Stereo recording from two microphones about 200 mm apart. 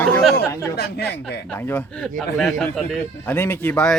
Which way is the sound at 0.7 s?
55° left (ahead or behind).